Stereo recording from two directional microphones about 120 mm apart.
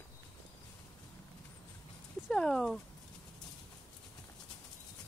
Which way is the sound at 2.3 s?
5° left (ahead or behind).